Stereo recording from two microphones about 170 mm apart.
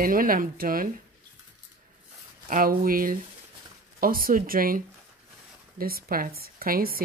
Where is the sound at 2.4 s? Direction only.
55° right (ahead or behind).